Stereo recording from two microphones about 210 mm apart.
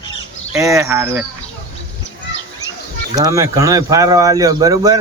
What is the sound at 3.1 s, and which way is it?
Speech, 15° right (ahead or behind).